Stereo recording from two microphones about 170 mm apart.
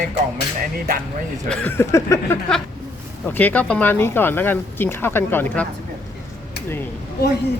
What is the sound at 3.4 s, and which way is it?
Speech, 10° left (ahead or behind).